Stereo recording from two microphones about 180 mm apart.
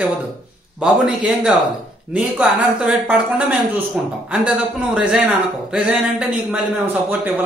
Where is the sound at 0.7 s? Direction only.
5° right (ahead or behind).